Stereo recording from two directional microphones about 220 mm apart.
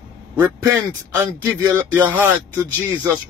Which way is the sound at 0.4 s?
10° right (ahead or behind).